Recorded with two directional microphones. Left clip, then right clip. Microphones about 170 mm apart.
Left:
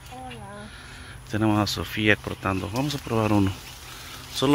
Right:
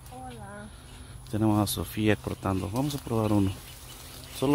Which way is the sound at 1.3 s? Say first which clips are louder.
Left 3 dB; 15° right (ahead or behind).